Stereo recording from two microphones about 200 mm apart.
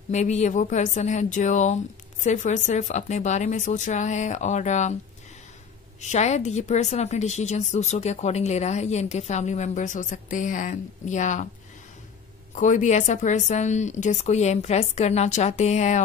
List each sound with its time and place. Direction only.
0.1 s a woman's voice: 35° left (ahead or behind)
5.9 s a woman's voice: 35° left (ahead or behind)
12.5 s a woman's voice: 40° left (ahead or behind)